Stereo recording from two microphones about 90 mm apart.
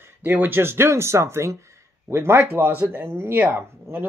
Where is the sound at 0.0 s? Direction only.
20° right (ahead or behind).